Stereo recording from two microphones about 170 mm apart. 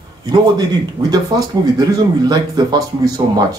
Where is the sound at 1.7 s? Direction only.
20° right (ahead or behind).